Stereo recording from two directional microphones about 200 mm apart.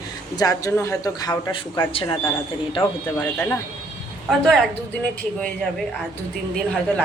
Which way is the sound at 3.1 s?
10° left (ahead or behind).